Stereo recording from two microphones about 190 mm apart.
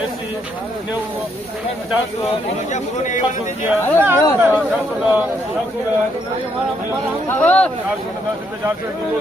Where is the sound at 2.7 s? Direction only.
40° left (ahead or behind).